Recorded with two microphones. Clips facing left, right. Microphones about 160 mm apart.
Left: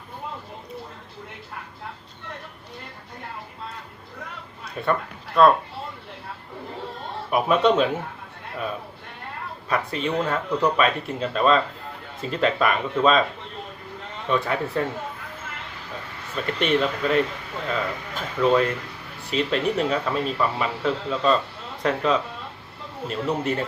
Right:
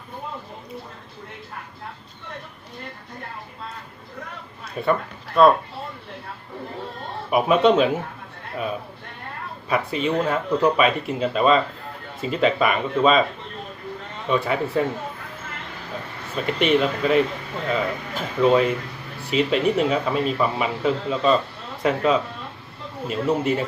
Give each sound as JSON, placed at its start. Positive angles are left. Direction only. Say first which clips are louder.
{"t": 4.9, "sound": "speech", "louder": "right 2 dB", "side_deg": -5}
{"t": 7.3, "sound": "speech", "louder": "right 2 dB", "side_deg": -5}
{"t": 9.6, "sound": "speech", "louder": "right 3 dB", "side_deg": -5}
{"t": 14.3, "sound": "speech", "louder": "right 2 dB", "side_deg": -5}
{"t": 16.5, "sound": "speech", "louder": "right 3 dB", "side_deg": -5}